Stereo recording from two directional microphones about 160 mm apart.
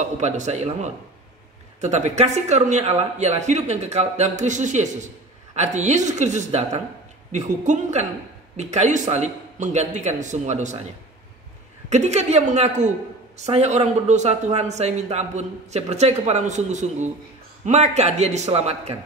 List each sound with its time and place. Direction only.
0.0 s speech: 45° right (ahead or behind)
11.9 s speech: 45° right (ahead or behind)